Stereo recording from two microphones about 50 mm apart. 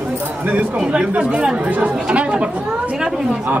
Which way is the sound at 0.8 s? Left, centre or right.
Centre.